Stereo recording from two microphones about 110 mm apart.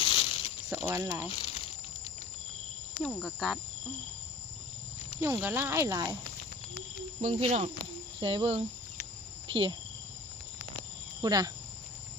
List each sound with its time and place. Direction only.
0.0 s pulleys: 55° left (ahead or behind)
0.7 s speech: 25° right (ahead or behind)
3.0 s cricket: 5° left (ahead or behind)
5.2 s speech: 20° right (ahead or behind)
7.2 s speech: 80° right
8.2 s speech: 55° right (ahead or behind)
11.2 s speech: 35° right (ahead or behind)